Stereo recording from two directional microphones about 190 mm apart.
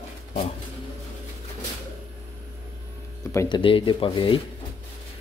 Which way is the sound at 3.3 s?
15° left (ahead or behind).